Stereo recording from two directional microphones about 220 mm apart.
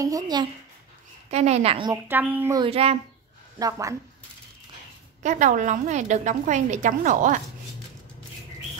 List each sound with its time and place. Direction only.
0.0 s a woman's voice: 15° right (ahead or behind)
1.3 s a woman's voice: 30° right (ahead or behind)
2.0 s a woman's voice: 10° right (ahead or behind)
2.6 s a woman's voice: 25° right (ahead or behind)
3.5 s a woman's voice: 15° right (ahead or behind)
5.2 s a woman's voice: 35° right (ahead or behind)